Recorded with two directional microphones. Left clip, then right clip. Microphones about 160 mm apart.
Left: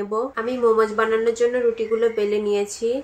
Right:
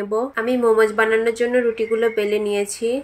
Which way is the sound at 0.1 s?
20° right (ahead or behind).